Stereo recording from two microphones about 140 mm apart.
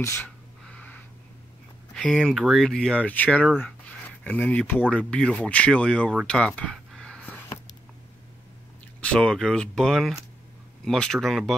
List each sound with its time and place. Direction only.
0.0 s gasp: 20° left (ahead or behind)
0.7 s wheeze: 10° left (ahead or behind)
2.0 s speech: 5° left (ahead or behind)
6.2 s a sound: 5° left (ahead or behind)
9.0 s speech: 5° left (ahead or behind)